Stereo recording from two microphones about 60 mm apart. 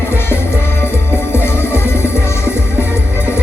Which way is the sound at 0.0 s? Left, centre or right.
Left.